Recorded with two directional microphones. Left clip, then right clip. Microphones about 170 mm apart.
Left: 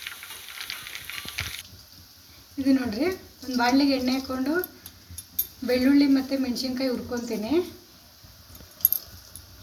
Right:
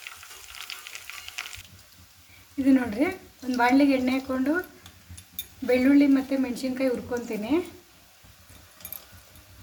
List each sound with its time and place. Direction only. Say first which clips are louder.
2.6 s a woman's voice: right 1 dB; 50° right (ahead or behind)
5.6 s a woman's voice: right 1 dB; 45° right (ahead or behind)